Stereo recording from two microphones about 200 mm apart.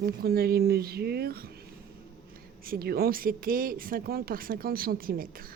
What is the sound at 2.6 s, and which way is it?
Speech, 50° right (ahead or behind).